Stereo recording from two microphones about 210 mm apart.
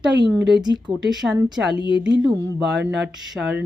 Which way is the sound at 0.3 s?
Centre (ahead or behind).